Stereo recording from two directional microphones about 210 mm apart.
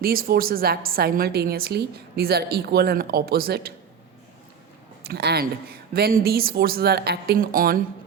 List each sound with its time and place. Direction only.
0.0 s a woman's voice: 45° right (ahead or behind)
5.0 s a woman's voice: 50° right (ahead or behind)